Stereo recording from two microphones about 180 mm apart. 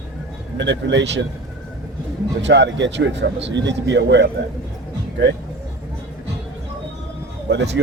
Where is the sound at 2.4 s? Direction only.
75° right (ahead or behind).